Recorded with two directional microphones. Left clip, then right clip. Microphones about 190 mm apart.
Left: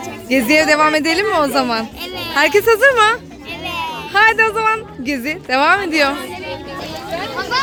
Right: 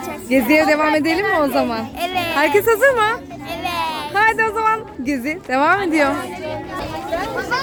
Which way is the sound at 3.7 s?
25° right (ahead or behind).